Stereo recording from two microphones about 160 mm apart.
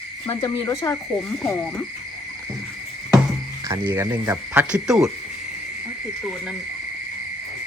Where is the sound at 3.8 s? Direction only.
15° right (ahead or behind).